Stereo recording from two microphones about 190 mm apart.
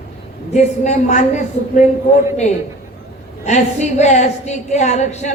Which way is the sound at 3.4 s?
35° left (ahead or behind).